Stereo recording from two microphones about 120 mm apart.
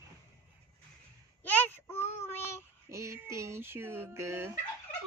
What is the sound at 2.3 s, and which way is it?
Child singing, 20° left (ahead or behind).